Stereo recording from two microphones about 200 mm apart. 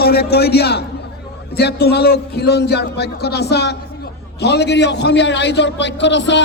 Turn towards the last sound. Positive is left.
turn(degrees=60)  # may be behind; listen again after turning